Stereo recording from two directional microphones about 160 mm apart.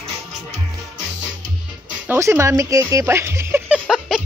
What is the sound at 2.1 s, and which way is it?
Speech, 20° right (ahead or behind).